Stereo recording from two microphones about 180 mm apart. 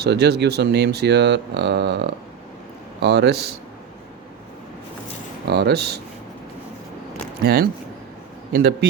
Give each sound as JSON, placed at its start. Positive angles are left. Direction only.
{"t": 0.0, "sound": "speech", "side_deg": -65}
{"t": 5.5, "sound": "speech", "side_deg": -65}
{"t": 7.4, "sound": "speech", "side_deg": -60}